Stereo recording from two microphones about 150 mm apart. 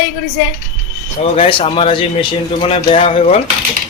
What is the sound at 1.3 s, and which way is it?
Speech, 35° left (ahead or behind).